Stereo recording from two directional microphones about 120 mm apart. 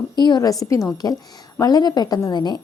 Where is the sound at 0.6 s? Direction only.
25° left (ahead or behind).